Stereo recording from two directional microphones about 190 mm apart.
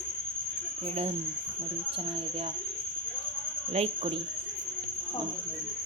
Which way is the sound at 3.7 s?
35° right (ahead or behind).